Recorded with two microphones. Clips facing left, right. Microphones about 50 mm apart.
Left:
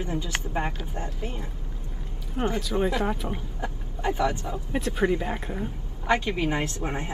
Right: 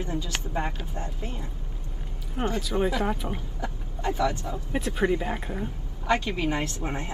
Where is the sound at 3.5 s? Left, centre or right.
Left.